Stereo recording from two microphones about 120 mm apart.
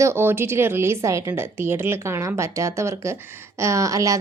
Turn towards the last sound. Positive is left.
turn(degrees=-25)  # may be behind; listen again after turning